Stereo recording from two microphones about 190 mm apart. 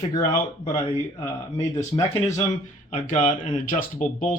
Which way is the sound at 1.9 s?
25° left (ahead or behind).